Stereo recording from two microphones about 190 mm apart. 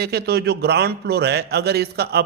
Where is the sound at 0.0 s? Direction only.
55° right (ahead or behind).